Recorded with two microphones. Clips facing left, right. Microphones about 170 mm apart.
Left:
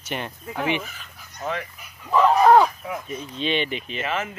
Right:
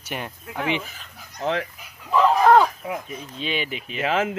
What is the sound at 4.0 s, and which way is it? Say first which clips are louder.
Speech: right 6 dB; 85° right.